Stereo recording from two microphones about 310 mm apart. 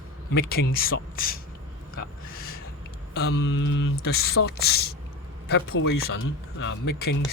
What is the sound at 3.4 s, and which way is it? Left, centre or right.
Speech, left.